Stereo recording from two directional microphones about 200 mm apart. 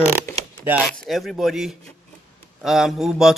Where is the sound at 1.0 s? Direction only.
Centre (ahead or behind).